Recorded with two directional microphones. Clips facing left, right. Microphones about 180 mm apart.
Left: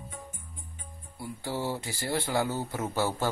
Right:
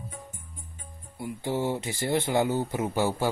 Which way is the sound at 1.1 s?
20° right (ahead or behind).